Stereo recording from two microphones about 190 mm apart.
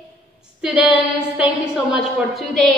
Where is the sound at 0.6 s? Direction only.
5° right (ahead or behind).